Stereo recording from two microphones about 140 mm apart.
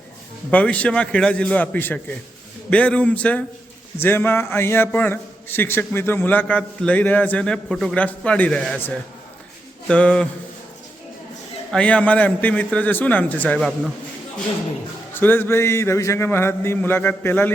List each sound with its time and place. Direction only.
0.5 s a man's voice: 10° left (ahead or behind)
11.7 s a man's voice: 10° left (ahead or behind)
15.1 s a man's voice: 15° left (ahead or behind)